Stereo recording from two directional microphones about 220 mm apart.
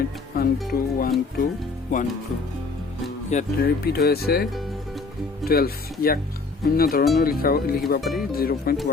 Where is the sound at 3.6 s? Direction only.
45° left (ahead or behind).